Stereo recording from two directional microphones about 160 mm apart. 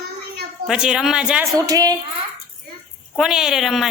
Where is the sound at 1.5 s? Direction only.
20° right (ahead or behind).